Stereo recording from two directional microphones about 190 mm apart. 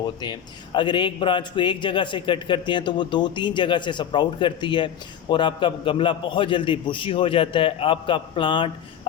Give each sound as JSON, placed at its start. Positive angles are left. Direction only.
{"t": 0.2, "sound": "a man's voice", "side_deg": 25}